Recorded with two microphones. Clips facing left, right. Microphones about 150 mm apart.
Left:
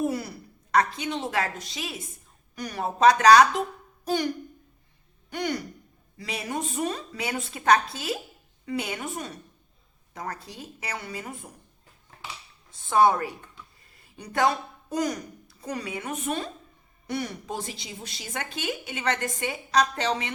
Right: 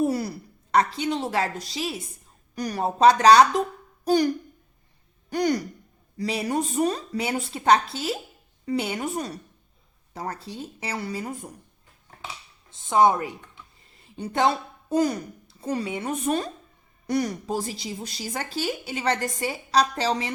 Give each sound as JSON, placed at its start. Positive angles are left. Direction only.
{"t": 0.1, "sound": "a woman's voice", "side_deg": -35}
{"t": 5.3, "sound": "a woman's voice", "side_deg": -40}
{"t": 12.7, "sound": "a woman's voice", "side_deg": -20}